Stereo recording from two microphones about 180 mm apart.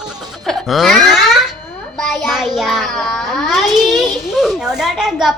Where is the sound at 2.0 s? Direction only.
5° left (ahead or behind).